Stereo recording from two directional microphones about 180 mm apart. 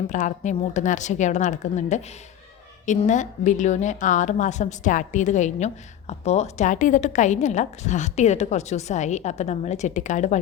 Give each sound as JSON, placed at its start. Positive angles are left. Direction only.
{"t": 0.1, "sound": "a woman's voice", "side_deg": 45}